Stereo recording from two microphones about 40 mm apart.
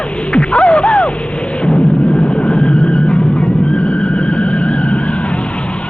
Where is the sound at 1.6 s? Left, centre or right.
Left.